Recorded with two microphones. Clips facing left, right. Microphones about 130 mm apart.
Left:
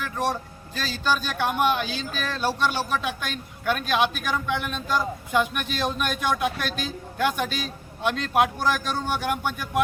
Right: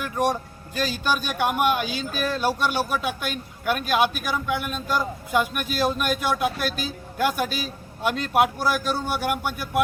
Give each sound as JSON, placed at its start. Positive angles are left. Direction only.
{"t": 0.0, "sound": "speech", "side_deg": -15}